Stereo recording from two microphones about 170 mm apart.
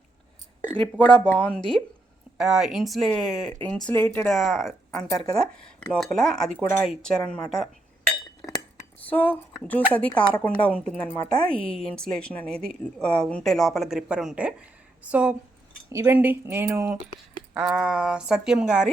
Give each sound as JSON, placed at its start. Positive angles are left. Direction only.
{"t": 0.8, "sound": "a woman's voice", "side_deg": 5}
{"t": 9.0, "sound": "a woman's voice", "side_deg": 10}